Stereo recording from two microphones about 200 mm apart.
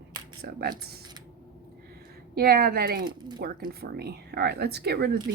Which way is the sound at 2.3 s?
50° right (ahead or behind).